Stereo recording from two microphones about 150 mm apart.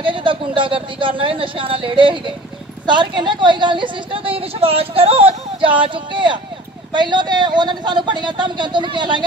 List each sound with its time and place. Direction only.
0.0 s a woman's voice: 35° right (ahead or behind)